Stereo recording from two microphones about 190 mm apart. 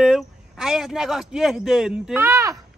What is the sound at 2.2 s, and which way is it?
Speech, 15° right (ahead or behind).